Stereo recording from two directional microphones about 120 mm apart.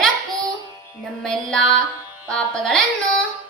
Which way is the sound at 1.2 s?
5° left (ahead or behind).